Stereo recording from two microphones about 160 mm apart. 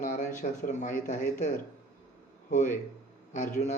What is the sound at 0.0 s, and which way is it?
Speech, 55° left (ahead or behind).